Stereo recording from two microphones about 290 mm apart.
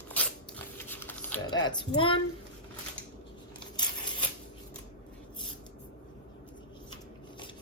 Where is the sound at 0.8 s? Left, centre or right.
Centre.